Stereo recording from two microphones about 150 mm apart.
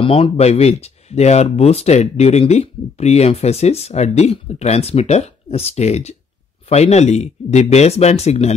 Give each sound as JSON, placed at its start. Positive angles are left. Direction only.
{"t": 0.0, "sound": "speech", "side_deg": 40}